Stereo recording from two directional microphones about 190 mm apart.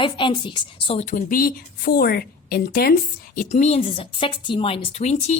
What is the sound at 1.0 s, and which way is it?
A woman's voice, 45° left (ahead or behind).